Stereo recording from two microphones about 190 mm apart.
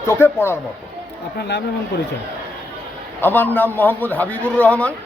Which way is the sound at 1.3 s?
60° left (ahead or behind).